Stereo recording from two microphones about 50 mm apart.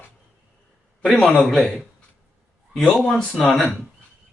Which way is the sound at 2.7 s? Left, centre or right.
Centre.